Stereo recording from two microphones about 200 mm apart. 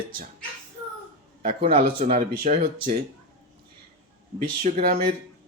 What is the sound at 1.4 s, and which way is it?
A man's voice, 40° right (ahead or behind).